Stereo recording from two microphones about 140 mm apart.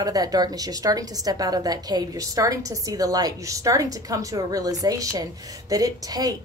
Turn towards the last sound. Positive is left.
turn(degrees=-25)  # may be behind; listen again after turning